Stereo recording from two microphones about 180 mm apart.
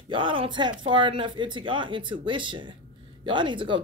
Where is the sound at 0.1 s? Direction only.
30° right (ahead or behind).